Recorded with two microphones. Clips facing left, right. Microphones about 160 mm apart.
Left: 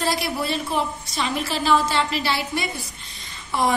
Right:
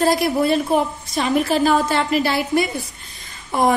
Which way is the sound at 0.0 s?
50° right (ahead or behind).